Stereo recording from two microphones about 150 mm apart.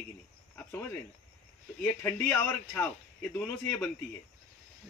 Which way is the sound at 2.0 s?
10° left (ahead or behind).